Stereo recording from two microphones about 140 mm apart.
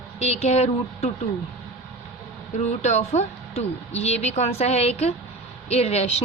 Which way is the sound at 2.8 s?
55° left (ahead or behind).